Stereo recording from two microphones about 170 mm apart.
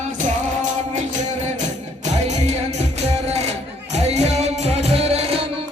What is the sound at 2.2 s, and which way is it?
Music, 40° right (ahead or behind).